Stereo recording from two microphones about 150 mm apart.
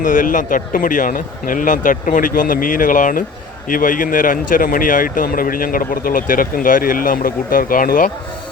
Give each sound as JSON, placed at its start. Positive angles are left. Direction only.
{"t": 0.0, "sound": "speech", "side_deg": 60}